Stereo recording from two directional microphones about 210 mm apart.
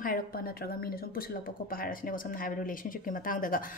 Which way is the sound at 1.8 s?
40° left (ahead or behind).